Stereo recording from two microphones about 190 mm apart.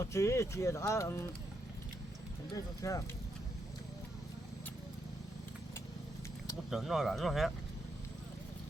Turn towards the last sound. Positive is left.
turn(degrees=0)  # may be behind; listen again after turning